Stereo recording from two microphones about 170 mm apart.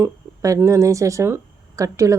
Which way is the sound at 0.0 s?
15° right (ahead or behind).